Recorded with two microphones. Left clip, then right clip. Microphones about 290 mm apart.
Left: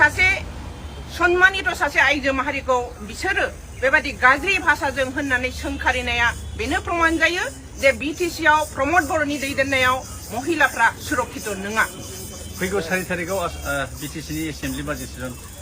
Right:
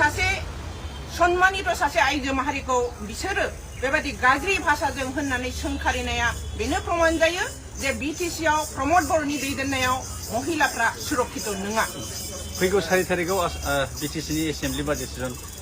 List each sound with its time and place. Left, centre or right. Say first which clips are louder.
0.0 s vehicle: left 6 dB; centre
1.1 s a woman's voice: left 3 dB; centre
12.5 s speech: right 2 dB; right